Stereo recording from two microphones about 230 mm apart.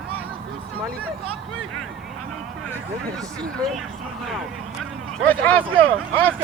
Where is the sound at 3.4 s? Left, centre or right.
Centre.